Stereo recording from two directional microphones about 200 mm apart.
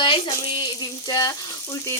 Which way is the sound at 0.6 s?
20° left (ahead or behind).